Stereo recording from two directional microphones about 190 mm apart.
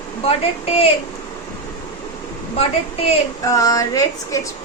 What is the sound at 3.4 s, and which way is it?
Speech, 20° left (ahead or behind).